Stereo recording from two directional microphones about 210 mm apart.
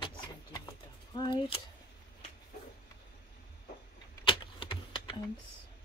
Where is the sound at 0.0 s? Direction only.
15° left (ahead or behind).